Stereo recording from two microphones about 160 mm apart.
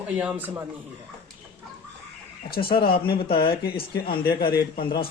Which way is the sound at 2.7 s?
70° left (ahead or behind).